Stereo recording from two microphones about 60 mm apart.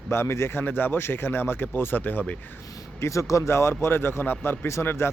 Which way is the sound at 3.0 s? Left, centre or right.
Left.